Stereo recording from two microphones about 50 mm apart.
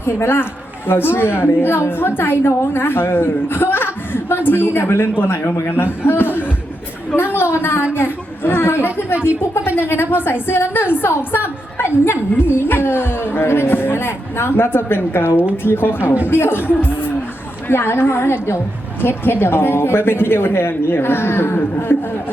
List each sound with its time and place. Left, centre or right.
0.0 s a woman's voice: left